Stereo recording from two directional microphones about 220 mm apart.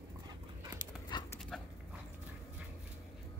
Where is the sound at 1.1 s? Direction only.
20° left (ahead or behind).